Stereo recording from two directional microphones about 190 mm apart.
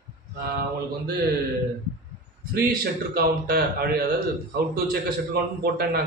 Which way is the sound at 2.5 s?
50° right (ahead or behind).